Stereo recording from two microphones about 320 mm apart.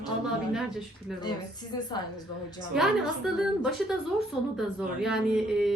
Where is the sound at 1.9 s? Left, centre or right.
Centre.